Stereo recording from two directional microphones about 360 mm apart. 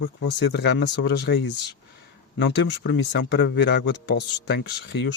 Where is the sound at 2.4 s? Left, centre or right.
Left.